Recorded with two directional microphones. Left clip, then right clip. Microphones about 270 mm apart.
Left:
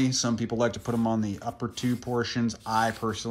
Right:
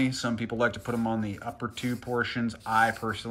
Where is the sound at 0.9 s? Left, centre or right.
Centre.